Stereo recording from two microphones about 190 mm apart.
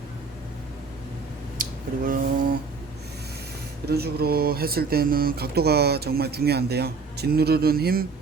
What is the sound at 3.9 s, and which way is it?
Speech, 55° right (ahead or behind).